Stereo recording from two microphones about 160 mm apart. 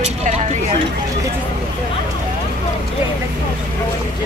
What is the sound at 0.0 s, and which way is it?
Vehicle, 45° right (ahead or behind).